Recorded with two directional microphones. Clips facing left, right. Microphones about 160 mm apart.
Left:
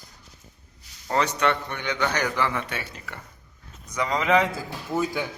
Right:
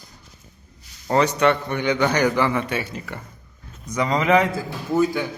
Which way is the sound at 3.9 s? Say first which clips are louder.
Right 4 dB; centre (ahead or behind).